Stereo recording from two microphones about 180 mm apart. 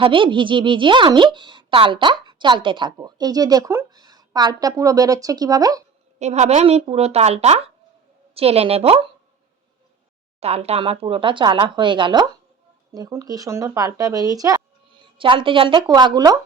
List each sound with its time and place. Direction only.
0.0 s a woman's voice: 30° right (ahead or behind)
6.1 s speech: 40° right (ahead or behind)
10.4 s a woman's voice: 35° right (ahead or behind)